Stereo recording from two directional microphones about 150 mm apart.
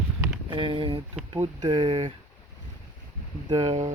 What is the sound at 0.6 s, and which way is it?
Speech, 35° right (ahead or behind).